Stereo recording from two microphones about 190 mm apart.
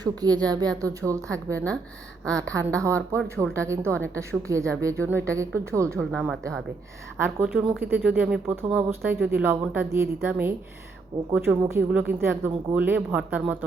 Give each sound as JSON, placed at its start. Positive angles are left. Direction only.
{"t": 0.0, "sound": "a woman's voice", "side_deg": -20}
{"t": 1.5, "sound": "a woman's voice", "side_deg": 5}
{"t": 2.3, "sound": "speech", "side_deg": -15}
{"t": 6.0, "sound": "speech", "side_deg": 0}
{"t": 7.2, "sound": "speech", "side_deg": -10}